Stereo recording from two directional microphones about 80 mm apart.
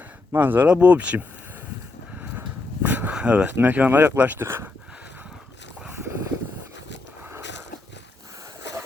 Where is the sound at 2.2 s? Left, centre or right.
Right.